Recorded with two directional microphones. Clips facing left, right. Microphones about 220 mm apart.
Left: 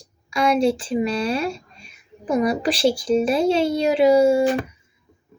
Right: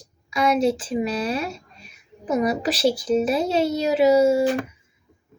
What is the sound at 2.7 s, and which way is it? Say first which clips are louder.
Speech: left 1 dB; 30° left (ahead or behind).